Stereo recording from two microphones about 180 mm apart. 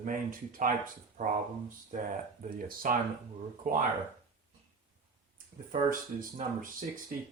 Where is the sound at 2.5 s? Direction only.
50° right (ahead or behind).